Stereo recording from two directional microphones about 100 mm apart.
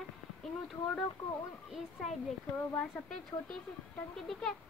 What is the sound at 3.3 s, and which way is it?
Speech, 35° left (ahead or behind).